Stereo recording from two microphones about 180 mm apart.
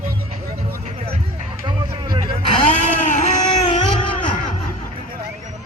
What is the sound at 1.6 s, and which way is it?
Music, 25° right (ahead or behind).